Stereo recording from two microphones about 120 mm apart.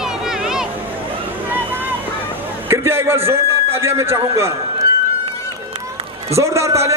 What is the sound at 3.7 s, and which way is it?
Speech, 20° right (ahead or behind).